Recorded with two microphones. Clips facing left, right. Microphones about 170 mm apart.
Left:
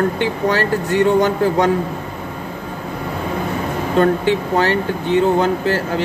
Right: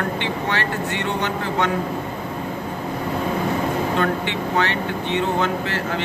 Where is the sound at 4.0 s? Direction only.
40° left (ahead or behind).